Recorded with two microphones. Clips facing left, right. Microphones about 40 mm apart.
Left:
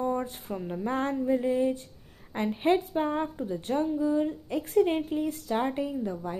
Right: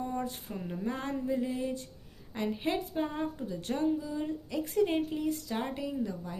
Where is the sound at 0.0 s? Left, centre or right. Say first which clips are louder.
Left 5 dB; left.